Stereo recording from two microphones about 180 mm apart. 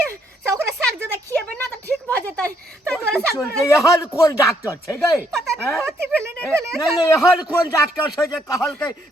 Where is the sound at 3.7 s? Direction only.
15° left (ahead or behind).